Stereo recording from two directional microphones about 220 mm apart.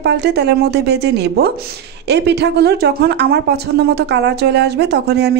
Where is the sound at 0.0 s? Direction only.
50° right (ahead or behind).